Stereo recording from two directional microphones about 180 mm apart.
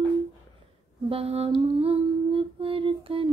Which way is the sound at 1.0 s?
35° right (ahead or behind).